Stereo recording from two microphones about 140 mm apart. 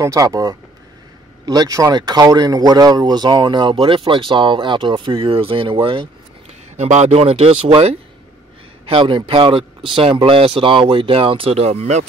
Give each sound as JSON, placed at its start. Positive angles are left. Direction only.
{"t": 0.0, "sound": "speech", "side_deg": -25}
{"t": 6.8, "sound": "speech", "side_deg": -55}